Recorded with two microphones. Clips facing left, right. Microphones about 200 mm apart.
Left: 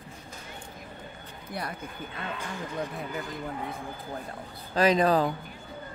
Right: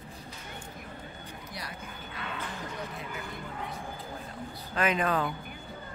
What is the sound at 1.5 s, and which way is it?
Speech, 55° left (ahead or behind).